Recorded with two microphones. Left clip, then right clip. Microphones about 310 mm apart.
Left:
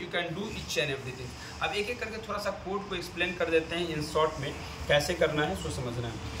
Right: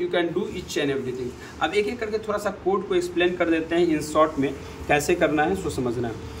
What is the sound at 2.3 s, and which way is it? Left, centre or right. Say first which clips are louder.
Speech: right 8 dB; right.